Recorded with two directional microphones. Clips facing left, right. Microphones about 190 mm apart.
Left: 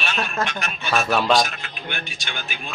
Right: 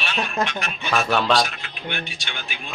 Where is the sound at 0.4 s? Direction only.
20° right (ahead or behind).